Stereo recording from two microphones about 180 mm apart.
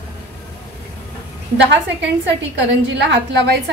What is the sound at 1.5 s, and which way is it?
Speech, 85° right.